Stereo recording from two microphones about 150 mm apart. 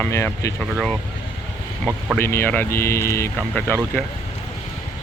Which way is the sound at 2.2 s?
15° left (ahead or behind).